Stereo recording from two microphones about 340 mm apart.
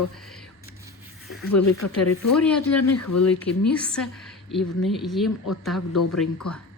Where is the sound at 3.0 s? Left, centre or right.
Left.